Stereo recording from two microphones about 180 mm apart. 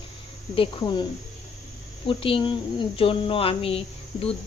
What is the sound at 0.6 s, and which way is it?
Speech, 25° left (ahead or behind).